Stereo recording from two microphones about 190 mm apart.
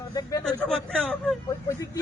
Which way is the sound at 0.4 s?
5° left (ahead or behind).